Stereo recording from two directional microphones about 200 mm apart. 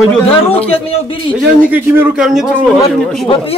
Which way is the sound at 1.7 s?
10° right (ahead or behind).